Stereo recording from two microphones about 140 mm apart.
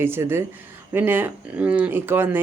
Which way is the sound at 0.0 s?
15° right (ahead or behind).